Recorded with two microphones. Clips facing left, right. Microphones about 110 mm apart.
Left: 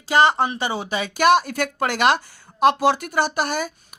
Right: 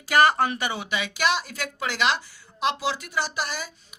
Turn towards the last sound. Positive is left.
turn(degrees=55)  # may be behind; listen again after turning